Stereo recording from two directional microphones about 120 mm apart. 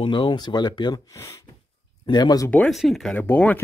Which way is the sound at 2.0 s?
35° left (ahead or behind).